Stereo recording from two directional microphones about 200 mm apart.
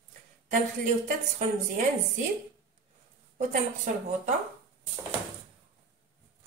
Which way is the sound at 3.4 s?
40° right (ahead or behind).